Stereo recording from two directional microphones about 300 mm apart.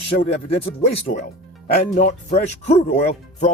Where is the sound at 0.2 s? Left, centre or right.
Centre.